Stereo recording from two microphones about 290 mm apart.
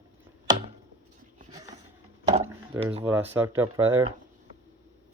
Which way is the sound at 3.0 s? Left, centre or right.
Centre.